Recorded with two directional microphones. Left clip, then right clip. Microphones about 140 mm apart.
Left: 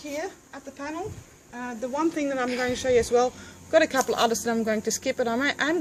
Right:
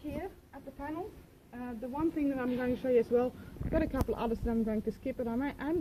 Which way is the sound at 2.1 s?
25° right (ahead or behind).